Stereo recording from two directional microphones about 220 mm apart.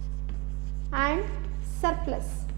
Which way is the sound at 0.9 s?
15° right (ahead or behind).